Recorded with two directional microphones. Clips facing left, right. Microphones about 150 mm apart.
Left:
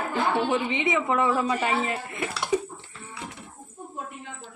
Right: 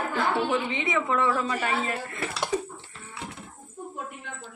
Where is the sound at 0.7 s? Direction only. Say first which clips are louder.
Left 2 dB; 20° left (ahead or behind).